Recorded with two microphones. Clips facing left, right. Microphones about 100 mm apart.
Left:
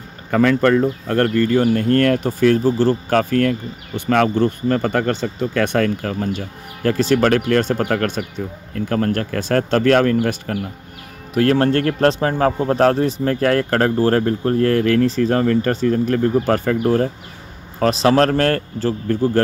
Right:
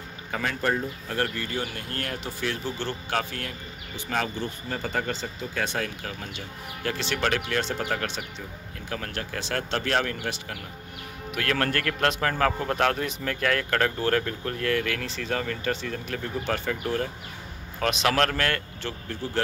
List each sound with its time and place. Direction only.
0.3 s speech: 60° left (ahead or behind)
11.3 s a man's voice: 30° left (ahead or behind); by 19.4 s 45° left (ahead or behind)